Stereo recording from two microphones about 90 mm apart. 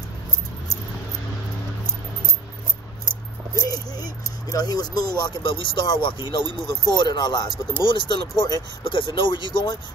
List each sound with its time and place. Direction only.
3.5 s a sound: 45° left (ahead or behind)
4.2 s speech: 35° left (ahead or behind)
4.6 s speech: 50° left (ahead or behind)
8.8 s speech: 70° left (ahead or behind)